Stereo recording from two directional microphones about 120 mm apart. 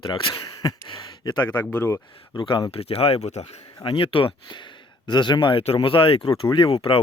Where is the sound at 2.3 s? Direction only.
40° left (ahead or behind); by 3.5 s 65° left (ahead or behind).